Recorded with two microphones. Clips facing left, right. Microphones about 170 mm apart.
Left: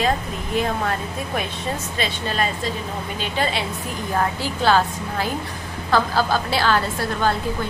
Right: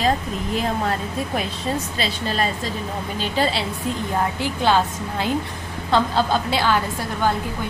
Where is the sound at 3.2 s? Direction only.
35° right (ahead or behind).